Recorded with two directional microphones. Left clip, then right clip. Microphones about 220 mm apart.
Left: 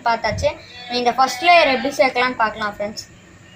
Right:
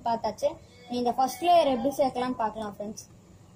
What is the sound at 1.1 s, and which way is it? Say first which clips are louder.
Speech: left 10 dB; 15° right (ahead or behind).